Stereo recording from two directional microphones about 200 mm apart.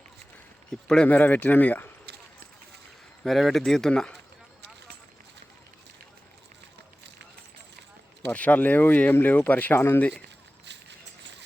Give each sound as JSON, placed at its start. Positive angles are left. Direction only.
{"t": 0.7, "sound": "speech", "side_deg": 5}
{"t": 3.2, "sound": "speech", "side_deg": 0}
{"t": 8.3, "sound": "speech", "side_deg": 10}
{"t": 10.7, "sound": "a sound", "side_deg": -60}